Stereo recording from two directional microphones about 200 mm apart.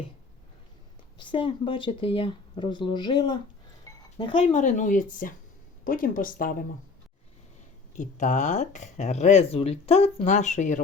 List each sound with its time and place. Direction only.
1.2 s speech: 25° left (ahead or behind); by 6.6 s 45° left (ahead or behind)
7.9 s speech: 40° left (ahead or behind)